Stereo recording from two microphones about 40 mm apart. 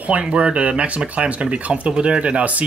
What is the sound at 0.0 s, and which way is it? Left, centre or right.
Speech, right.